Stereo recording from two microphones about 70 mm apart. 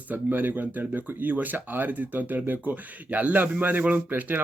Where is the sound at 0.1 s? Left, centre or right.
Right.